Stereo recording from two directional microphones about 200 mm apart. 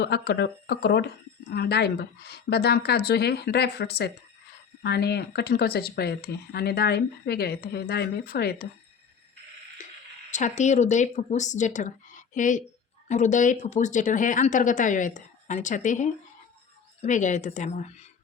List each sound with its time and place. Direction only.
0.0 s speech: 55° left (ahead or behind)
10.3 s a woman's voice: 35° left (ahead or behind)